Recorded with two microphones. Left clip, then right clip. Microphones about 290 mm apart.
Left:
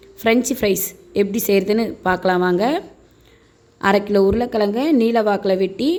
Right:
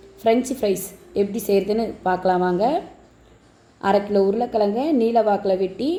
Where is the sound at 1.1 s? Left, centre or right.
Left.